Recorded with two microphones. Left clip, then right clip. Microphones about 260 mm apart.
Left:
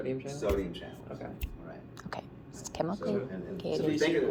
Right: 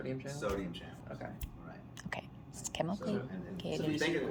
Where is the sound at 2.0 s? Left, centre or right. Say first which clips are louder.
Left 1 dB; right.